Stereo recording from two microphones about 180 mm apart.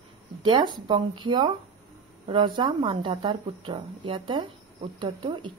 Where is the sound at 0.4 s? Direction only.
25° right (ahead or behind).